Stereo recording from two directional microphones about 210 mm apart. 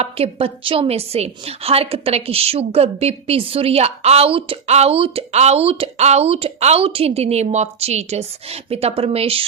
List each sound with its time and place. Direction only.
0.0 s a woman's voice: 25° right (ahead or behind)